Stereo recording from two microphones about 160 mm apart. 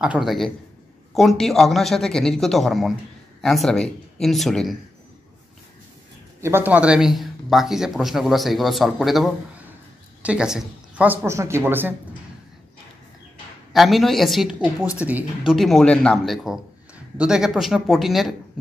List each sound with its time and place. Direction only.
0.0 s speech: 5° right (ahead or behind)
6.4 s speech: 10° right (ahead or behind)
13.7 s speech: centre (ahead or behind)
15.5 s speech: centre (ahead or behind)